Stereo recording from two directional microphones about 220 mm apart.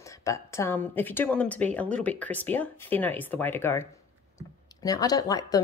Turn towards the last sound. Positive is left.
turn(degrees=15)  # may be behind; listen again after turning